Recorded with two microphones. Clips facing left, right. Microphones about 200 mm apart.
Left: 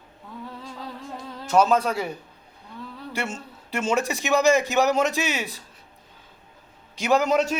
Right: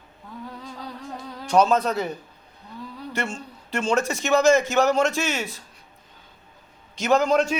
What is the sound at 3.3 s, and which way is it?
A man's voice, 5° left (ahead or behind).